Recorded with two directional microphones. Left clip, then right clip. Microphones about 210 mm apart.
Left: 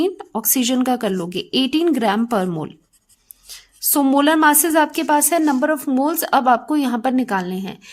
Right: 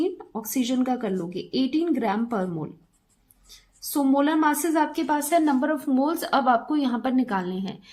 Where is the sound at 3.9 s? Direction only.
45° left (ahead or behind).